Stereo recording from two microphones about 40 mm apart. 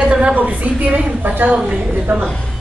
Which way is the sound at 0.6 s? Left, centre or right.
Right.